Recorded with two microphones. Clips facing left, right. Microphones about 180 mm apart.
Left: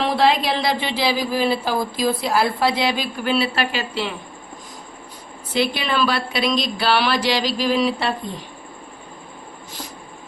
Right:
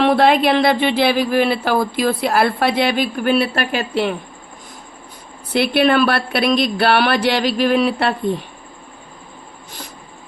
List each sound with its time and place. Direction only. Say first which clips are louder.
0.0 s speech: right 5 dB; 60° right (ahead or behind)
5.5 s speech: right 6 dB; 60° right (ahead or behind)